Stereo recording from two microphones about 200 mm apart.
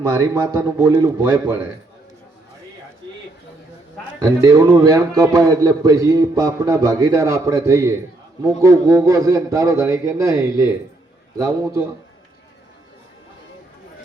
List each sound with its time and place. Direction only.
0.0 s a man's voice: 15° right (ahead or behind)
4.2 s a man's voice: 15° right (ahead or behind)